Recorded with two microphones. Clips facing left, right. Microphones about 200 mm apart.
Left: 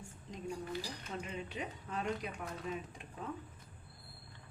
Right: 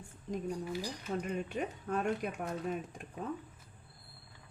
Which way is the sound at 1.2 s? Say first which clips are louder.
Right 5 dB; 50° right (ahead or behind).